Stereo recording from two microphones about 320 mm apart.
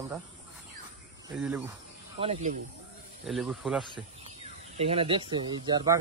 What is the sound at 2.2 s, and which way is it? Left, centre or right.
Speech, centre.